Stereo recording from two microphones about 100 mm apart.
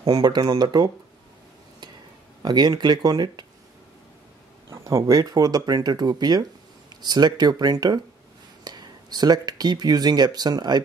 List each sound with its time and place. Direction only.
0.0 s speech: 40° right (ahead or behind)
2.4 s speech: 45° right (ahead or behind)
4.6 s speech: 30° right (ahead or behind)
5.1 s speech: 40° right (ahead or behind)